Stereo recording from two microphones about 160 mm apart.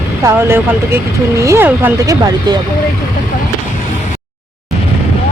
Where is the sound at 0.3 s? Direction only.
15° right (ahead or behind).